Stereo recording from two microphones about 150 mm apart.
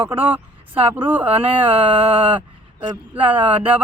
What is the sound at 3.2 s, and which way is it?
Speech, 10° right (ahead or behind).